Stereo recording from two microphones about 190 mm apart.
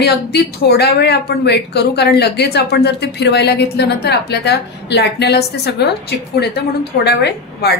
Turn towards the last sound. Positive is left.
turn(degrees=60)  # may be behind; listen again after turning